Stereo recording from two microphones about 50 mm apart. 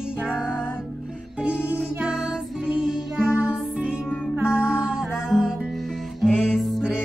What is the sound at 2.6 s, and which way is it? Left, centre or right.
Music, centre.